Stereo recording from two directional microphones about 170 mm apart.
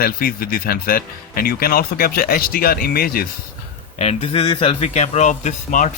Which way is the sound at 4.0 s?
35° left (ahead or behind).